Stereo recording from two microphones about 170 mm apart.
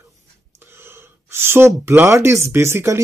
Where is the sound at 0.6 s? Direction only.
15° right (ahead or behind).